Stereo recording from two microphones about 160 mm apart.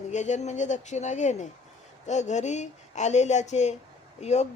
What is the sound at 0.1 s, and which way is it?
Speech, 50° left (ahead or behind).